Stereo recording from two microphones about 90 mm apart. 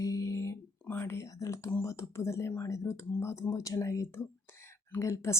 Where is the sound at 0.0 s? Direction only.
40° left (ahead or behind).